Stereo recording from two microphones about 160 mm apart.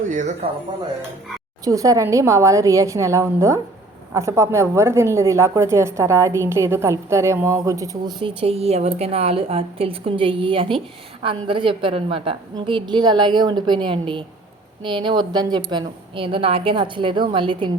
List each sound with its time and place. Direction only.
0.1 s speech: 50° right (ahead or behind)
1.6 s a woman's voice: 20° right (ahead or behind)
8.4 s a woman's voice: 40° right (ahead or behind)